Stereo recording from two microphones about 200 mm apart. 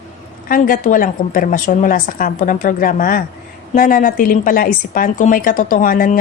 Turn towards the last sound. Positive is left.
turn(degrees=45)  # may be behind; listen again after turning